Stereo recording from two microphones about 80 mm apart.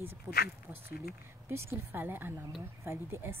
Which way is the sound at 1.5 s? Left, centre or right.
Right.